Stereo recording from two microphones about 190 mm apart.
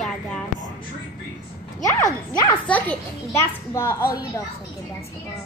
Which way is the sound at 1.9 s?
15° left (ahead or behind).